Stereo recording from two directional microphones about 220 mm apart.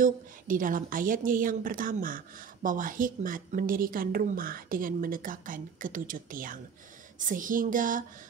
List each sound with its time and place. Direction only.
0.0 s a woman's voice: 35° right (ahead or behind)